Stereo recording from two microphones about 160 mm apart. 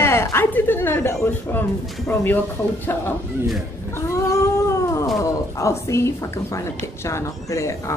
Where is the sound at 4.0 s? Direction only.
20° left (ahead or behind).